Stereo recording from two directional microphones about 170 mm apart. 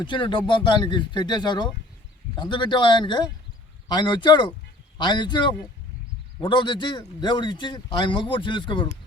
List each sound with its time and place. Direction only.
0.0 s a man's voice: 30° left (ahead or behind)